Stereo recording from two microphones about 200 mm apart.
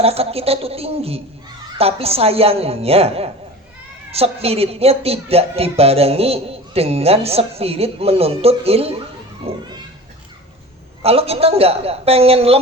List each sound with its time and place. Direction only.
0.0 s a woman's voice: 30° right (ahead or behind)
11.0 s a woman's voice: 30° right (ahead or behind)